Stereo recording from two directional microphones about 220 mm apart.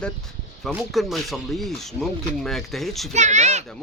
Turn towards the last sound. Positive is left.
turn(degrees=-30)  # may be behind; listen again after turning